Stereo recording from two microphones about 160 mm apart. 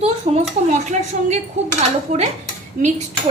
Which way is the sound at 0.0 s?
40° right (ahead or behind).